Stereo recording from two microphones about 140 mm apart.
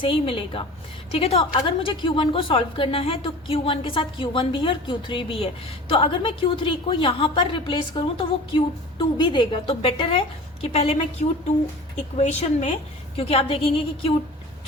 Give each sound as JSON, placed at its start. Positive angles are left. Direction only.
{"t": 0.0, "sound": "a woman's voice", "side_deg": 40}
{"t": 13.1, "sound": "a woman's voice", "side_deg": 45}